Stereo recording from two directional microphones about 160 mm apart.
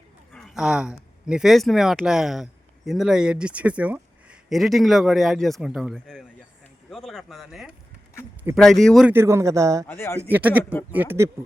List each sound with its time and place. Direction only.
0.3 s speech: centre (ahead or behind)
9.0 s a man's voice: 15° right (ahead or behind)
9.8 s speech: 15° left (ahead or behind)
10.2 s speech: 10° right (ahead or behind)